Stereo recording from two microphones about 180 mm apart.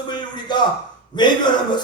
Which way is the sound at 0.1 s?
25° left (ahead or behind).